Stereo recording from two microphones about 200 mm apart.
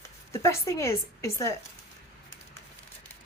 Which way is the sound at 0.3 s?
15° left (ahead or behind).